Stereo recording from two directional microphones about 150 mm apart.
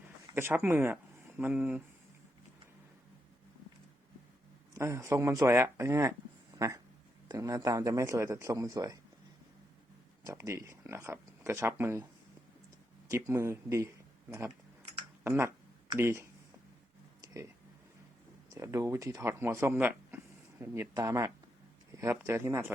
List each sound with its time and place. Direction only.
0.3 s speech: 15° right (ahead or behind)
4.7 s a man's voice: 20° right (ahead or behind)
6.6 s a sound: 25° right (ahead or behind)
7.3 s a man's voice: 25° right (ahead or behind)
10.2 s speech: 20° right (ahead or behind)
13.1 s speech: 20° right (ahead or behind)
18.5 s a man's voice: 20° right (ahead or behind)